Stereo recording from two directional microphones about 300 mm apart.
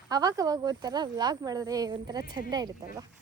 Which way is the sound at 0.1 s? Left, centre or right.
Centre.